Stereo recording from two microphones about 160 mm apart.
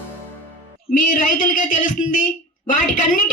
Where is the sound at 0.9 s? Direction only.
55° left (ahead or behind).